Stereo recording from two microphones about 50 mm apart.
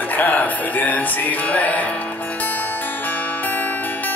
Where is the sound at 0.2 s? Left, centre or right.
Left.